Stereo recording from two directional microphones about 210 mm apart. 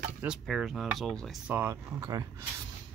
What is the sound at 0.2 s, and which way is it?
Speech, 5° right (ahead or behind).